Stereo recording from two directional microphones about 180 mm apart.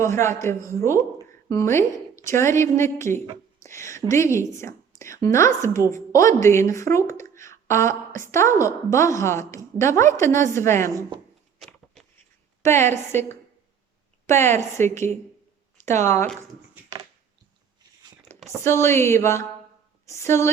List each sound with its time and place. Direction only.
0.0 s a woman's voice: 15° left (ahead or behind)
3.7 s a sound: 15° left (ahead or behind)
4.1 s a woman's voice: 15° left (ahead or behind)
12.0 s a sound: centre (ahead or behind)
12.6 s a woman's voice: 15° left (ahead or behind)
14.3 s a woman's voice: 15° left (ahead or behind)
18.6 s a woman's voice: 15° left (ahead or behind)